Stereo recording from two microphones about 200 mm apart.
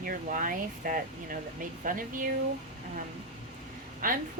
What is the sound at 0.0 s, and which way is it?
Speech, 45° right (ahead or behind).